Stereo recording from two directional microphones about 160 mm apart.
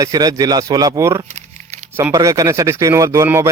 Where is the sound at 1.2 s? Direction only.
50° right (ahead or behind).